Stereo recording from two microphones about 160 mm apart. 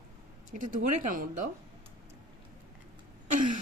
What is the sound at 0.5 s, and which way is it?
Speech, 55° right (ahead or behind).